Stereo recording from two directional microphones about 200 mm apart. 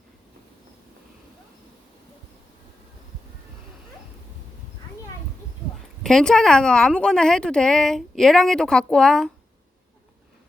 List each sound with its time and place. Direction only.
6.0 s a woman's voice: 5° left (ahead or behind)